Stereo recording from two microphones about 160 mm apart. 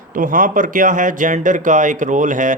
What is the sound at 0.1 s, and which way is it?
Speech, 55° right (ahead or behind).